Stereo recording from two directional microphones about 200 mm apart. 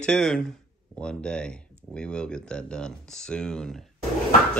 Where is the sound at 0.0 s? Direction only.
5° left (ahead or behind).